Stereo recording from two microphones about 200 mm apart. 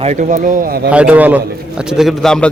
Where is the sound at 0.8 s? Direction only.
5° right (ahead or behind).